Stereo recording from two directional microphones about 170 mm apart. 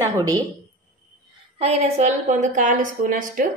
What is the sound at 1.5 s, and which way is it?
A woman's voice, 40° right (ahead or behind).